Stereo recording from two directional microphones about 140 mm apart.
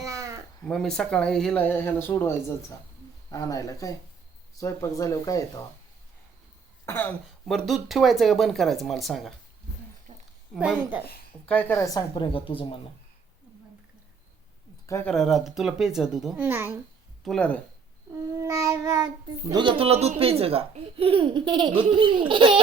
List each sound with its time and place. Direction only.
0.0 s cat: 25° right (ahead or behind)
0.6 s speech: 5° left (ahead or behind); by 5.5 s 25° left (ahead or behind)
6.8 s speech: 15° left (ahead or behind)
7.4 s speech: centre (ahead or behind)
10.1 s a sound: 60° right (ahead or behind)
10.5 s a woman's voice: 5° right (ahead or behind)
11.4 s speech: 10° left (ahead or behind)
11.8 s a woman's voice: 30° left (ahead or behind)
15.0 s speech: centre (ahead or behind); by 16.8 s 15° right (ahead or behind)
17.2 s speech: 5° left (ahead or behind)
18.3 s child singing: 20° right (ahead or behind)
19.5 s speech: 35° right (ahead or behind)